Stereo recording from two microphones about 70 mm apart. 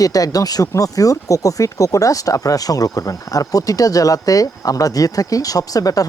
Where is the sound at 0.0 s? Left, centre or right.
Left.